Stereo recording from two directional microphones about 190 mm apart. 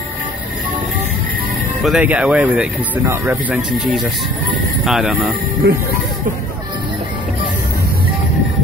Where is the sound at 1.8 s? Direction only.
5° right (ahead or behind).